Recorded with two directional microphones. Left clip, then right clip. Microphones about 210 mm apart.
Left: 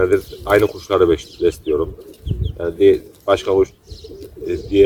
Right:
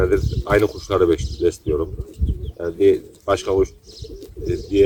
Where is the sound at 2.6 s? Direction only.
Centre (ahead or behind).